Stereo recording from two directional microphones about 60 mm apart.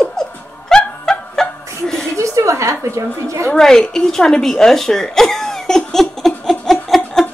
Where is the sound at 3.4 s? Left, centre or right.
Centre.